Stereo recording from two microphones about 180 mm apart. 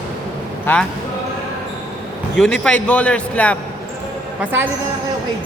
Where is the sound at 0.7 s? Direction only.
10° left (ahead or behind).